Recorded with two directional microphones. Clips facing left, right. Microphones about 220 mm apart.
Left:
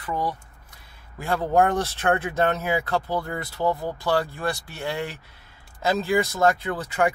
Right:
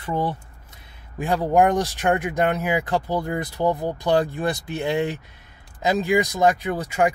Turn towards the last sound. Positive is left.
turn(degrees=-15)  # may be behind; listen again after turning